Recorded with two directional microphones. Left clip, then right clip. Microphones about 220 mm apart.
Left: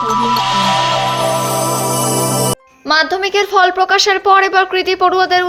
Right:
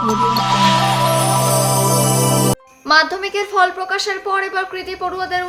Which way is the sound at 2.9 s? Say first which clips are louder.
Left 1 dB; 20° left (ahead or behind).